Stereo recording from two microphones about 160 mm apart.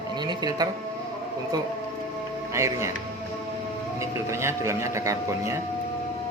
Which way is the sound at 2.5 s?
20° right (ahead or behind).